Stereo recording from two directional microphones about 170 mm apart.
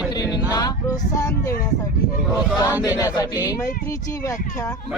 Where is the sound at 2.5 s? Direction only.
10° right (ahead or behind).